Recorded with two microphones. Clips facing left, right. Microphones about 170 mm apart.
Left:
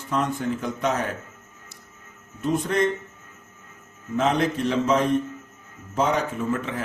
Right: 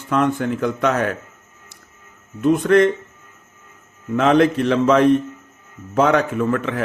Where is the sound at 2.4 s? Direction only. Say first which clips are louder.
Right 9 dB; 65° right (ahead or behind).